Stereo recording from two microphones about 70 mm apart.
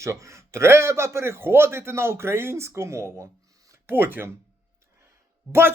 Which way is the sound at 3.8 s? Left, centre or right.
Right.